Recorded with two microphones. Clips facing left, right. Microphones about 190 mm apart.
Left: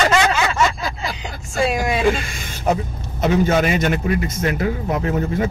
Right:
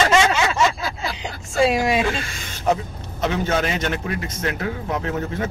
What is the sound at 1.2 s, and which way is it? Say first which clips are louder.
Music: right 2 dB; 20° right (ahead or behind).